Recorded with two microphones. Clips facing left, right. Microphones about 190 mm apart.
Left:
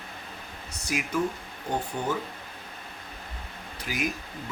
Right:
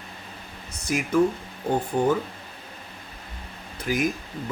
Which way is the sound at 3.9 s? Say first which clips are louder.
Right 8 dB; 45° right (ahead or behind).